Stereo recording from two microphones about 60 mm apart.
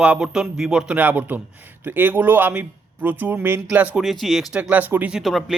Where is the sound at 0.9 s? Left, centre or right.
Right.